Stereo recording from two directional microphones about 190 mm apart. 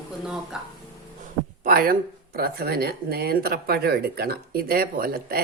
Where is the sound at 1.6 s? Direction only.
50° right (ahead or behind).